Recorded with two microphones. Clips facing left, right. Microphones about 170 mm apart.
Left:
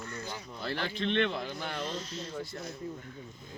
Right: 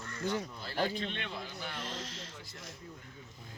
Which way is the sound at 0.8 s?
40° right (ahead or behind).